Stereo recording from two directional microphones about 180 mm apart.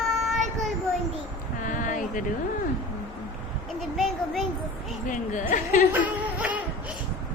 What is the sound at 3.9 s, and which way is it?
Speech, centre (ahead or behind).